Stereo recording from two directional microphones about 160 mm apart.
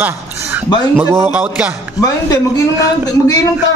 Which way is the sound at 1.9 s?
25° left (ahead or behind).